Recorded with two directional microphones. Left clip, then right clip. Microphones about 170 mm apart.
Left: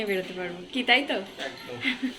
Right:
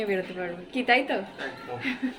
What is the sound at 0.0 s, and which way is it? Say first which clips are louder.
A woman's voice: right 1 dB; centre (ahead or behind).